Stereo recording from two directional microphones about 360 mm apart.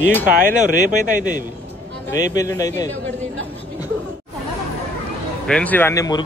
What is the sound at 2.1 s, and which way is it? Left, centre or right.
Speech, centre.